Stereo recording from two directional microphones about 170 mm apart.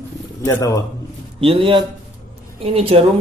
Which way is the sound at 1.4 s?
30° right (ahead or behind).